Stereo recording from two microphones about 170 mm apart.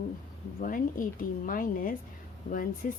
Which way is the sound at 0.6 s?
55° left (ahead or behind).